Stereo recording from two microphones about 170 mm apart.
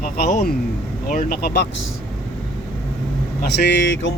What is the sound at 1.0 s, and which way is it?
Speech, 55° left (ahead or behind).